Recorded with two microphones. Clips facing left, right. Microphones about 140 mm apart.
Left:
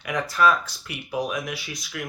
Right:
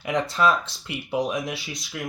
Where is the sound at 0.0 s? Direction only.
25° right (ahead or behind).